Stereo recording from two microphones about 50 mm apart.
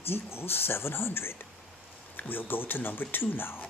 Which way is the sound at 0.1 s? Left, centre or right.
Left.